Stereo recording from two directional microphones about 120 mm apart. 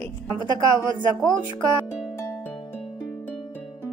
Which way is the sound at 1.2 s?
5° left (ahead or behind).